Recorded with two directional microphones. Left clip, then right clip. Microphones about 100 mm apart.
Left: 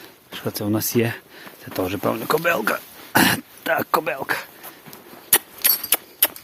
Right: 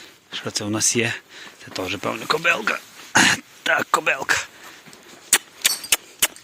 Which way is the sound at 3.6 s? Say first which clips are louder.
Right 2 dB; 15° left (ahead or behind).